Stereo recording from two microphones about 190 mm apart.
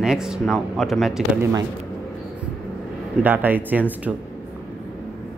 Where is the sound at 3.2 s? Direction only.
10° right (ahead or behind).